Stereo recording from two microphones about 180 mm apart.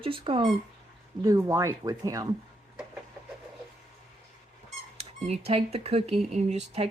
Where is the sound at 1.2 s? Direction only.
15° right (ahead or behind).